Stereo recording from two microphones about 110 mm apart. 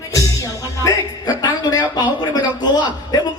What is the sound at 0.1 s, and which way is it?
Music, 30° left (ahead or behind).